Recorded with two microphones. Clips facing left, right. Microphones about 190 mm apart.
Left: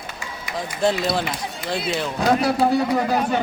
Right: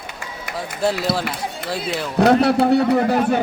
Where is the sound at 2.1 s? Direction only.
65° right (ahead or behind).